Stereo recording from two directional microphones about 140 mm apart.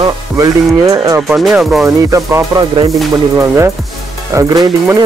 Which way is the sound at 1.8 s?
20° right (ahead or behind).